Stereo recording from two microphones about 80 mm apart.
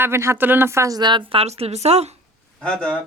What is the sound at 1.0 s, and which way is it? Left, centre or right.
Speech, right.